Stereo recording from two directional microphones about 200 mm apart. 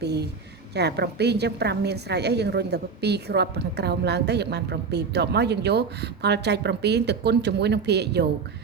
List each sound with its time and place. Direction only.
0.0 s a woman's voice: 55° right (ahead or behind)